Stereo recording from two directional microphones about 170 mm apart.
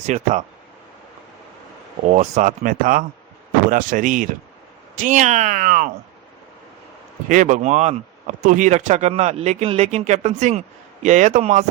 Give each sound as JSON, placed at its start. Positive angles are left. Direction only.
{"t": 0.0, "sound": "speech", "side_deg": -45}
{"t": 2.1, "sound": "speech", "side_deg": -45}
{"t": 7.3, "sound": "speech", "side_deg": -45}